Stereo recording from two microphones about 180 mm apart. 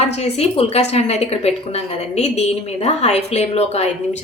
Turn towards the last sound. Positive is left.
turn(degrees=40)  # may be behind; listen again after turning